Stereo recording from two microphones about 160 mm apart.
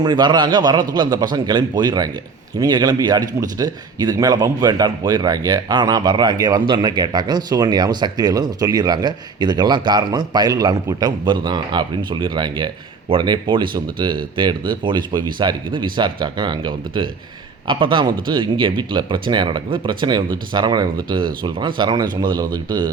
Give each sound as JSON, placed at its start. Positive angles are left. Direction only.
{"t": 0.0, "sound": "a man's voice", "side_deg": -25}